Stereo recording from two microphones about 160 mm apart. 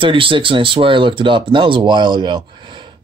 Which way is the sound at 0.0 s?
35° right (ahead or behind).